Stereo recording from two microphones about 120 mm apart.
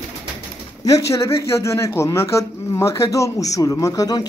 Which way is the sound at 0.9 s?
30° left (ahead or behind).